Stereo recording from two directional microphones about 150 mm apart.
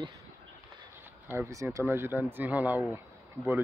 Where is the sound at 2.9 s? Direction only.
15° right (ahead or behind).